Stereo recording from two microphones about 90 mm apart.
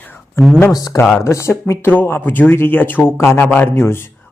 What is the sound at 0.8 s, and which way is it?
A man's voice, 40° left (ahead or behind).